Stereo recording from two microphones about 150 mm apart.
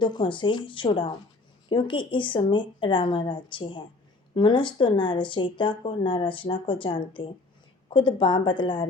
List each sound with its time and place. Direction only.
0.0 s speech: 30° left (ahead or behind)